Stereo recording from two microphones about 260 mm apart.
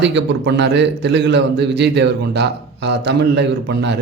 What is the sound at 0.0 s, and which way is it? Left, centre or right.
A man's voice, right.